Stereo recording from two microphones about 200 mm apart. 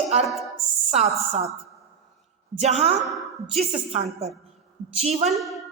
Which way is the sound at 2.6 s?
30° right (ahead or behind).